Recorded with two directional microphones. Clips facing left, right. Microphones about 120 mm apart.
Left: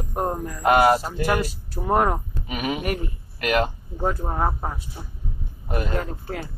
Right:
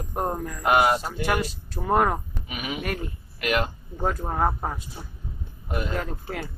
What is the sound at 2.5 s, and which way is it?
Speech, 40° left (ahead or behind).